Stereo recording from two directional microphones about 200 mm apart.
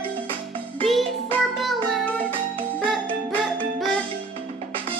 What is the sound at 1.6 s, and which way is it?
Music, centre (ahead or behind).